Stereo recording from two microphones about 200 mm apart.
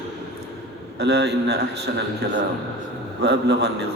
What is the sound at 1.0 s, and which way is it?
Speech, 55° right (ahead or behind).